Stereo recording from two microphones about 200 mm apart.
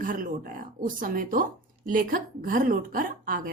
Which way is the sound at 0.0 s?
45° right (ahead or behind).